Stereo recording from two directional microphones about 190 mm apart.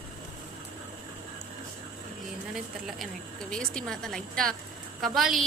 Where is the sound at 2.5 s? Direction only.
Centre (ahead or behind).